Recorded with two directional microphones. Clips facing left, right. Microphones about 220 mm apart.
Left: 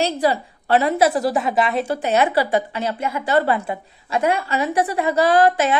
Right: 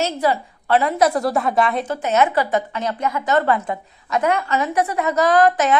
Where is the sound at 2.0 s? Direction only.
35° left (ahead or behind).